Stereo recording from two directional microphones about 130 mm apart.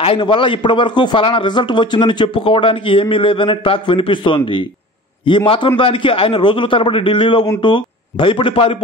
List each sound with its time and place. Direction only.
0.0 s a man's voice: 40° left (ahead or behind)